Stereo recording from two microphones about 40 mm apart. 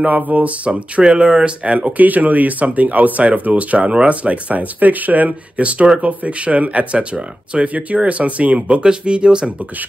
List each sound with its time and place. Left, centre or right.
0.0 s speech: right
2.0 s speech: right